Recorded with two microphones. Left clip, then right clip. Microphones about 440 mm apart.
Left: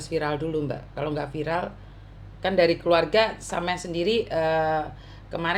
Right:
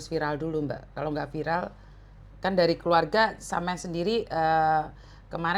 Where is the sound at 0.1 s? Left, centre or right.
Right.